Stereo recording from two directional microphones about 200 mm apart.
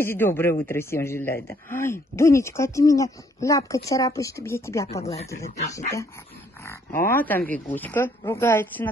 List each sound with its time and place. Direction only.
0.0 s speech: 10° left (ahead or behind)
5.0 s speech: 30° left (ahead or behind)
6.6 s pig: 15° left (ahead or behind)
7.1 s speech: 10° left (ahead or behind)